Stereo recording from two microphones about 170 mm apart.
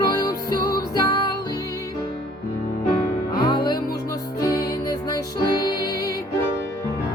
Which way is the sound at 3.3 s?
25° left (ahead or behind).